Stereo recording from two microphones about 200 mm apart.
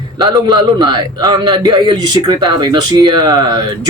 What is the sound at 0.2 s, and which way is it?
A man's voice, 20° right (ahead or behind).